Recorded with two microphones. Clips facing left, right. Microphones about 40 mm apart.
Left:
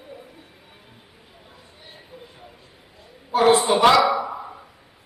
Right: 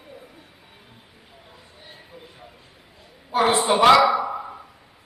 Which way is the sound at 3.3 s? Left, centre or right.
Centre.